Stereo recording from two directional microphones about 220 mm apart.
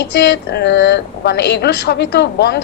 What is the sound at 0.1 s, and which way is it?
A woman's voice, 50° left (ahead or behind).